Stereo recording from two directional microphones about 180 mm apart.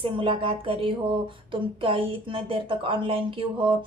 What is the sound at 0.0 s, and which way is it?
A woman's voice, 30° right (ahead or behind).